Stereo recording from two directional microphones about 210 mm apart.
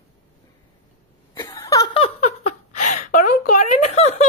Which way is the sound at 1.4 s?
20° left (ahead or behind).